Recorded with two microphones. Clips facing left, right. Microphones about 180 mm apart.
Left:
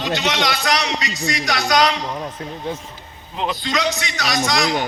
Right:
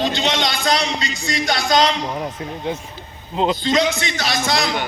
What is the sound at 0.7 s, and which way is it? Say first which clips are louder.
A man's voice: right 1 dB; 25° right (ahead or behind).